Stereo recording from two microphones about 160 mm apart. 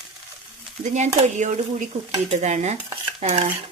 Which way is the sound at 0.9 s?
45° right (ahead or behind).